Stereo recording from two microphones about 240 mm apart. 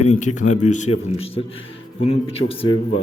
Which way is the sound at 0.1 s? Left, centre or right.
Left.